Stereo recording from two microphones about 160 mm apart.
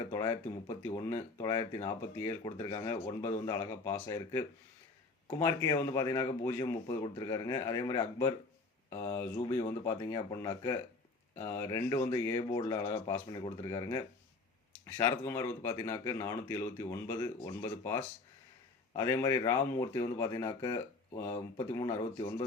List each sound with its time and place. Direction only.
0.0 s speech: 20° left (ahead or behind)